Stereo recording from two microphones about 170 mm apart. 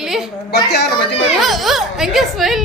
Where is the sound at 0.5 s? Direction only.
75° left (ahead or behind).